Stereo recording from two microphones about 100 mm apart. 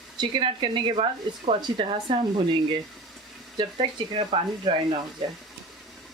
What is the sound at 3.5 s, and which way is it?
Speech, 60° right (ahead or behind).